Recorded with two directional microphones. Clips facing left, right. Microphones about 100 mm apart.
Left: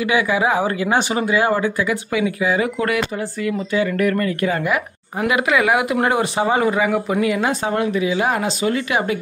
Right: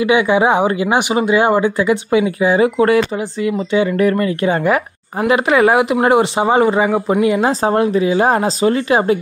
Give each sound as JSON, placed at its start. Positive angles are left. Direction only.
{"t": 0.0, "sound": "speech", "side_deg": -25}